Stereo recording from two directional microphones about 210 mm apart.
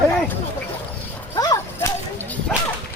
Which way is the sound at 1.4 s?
15° left (ahead or behind).